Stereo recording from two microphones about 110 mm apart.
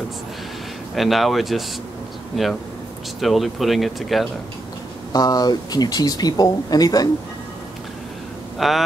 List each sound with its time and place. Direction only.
0.9 s speech: centre (ahead or behind)
5.1 s speech: 35° left (ahead or behind)
8.5 s speech: centre (ahead or behind)